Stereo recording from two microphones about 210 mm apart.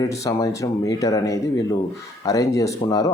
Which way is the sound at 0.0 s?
15° left (ahead or behind).